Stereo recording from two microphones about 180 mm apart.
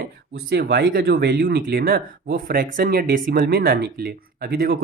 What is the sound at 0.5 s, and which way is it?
Speech, 65° right (ahead or behind).